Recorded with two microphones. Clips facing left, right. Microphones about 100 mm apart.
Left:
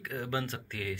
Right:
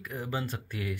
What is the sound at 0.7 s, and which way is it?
Speech, 15° right (ahead or behind).